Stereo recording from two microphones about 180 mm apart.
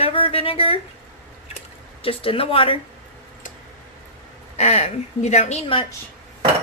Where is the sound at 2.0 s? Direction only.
30° left (ahead or behind).